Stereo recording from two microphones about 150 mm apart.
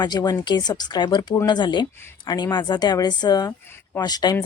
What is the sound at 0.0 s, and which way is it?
A woman's voice, 30° left (ahead or behind).